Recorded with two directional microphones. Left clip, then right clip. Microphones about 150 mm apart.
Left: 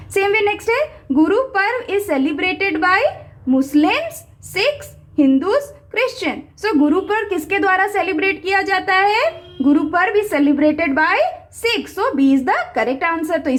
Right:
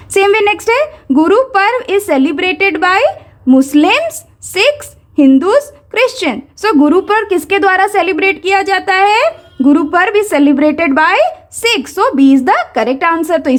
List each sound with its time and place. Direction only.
0.1 s a woman's voice: 35° right (ahead or behind)